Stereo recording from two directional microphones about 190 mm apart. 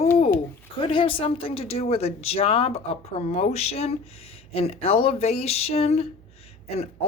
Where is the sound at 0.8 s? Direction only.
30° left (ahead or behind).